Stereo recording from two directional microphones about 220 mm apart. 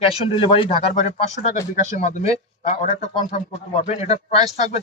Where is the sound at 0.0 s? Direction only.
25° left (ahead or behind).